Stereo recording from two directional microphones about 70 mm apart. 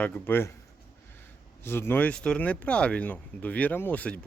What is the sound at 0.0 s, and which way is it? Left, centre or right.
Speech, left.